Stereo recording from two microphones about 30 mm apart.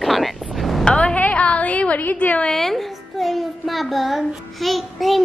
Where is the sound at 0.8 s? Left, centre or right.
Left.